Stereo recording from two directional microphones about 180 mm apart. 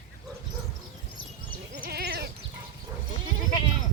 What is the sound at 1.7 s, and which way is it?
Goat, 65° right (ahead or behind).